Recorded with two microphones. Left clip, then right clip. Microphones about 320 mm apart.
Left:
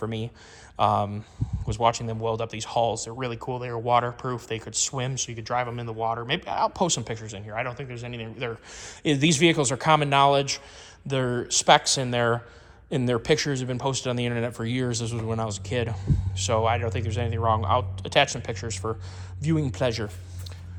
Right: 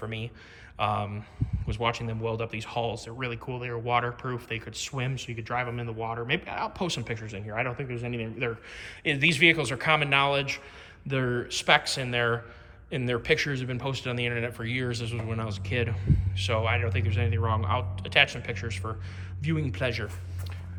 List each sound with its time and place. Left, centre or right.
0.8 s speech: centre